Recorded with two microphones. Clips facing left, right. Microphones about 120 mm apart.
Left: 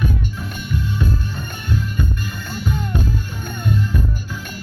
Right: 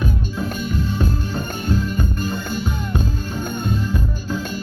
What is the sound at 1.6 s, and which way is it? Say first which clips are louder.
Music: right 1 dB; 35° right (ahead or behind).